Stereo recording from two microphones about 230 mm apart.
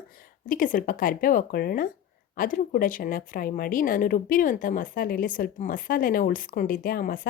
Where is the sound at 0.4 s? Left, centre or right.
Left.